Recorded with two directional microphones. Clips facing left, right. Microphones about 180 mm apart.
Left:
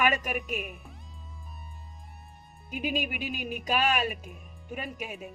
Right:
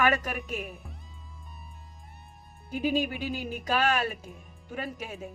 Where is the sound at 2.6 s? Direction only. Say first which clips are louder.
Right 4 dB; 15° left (ahead or behind).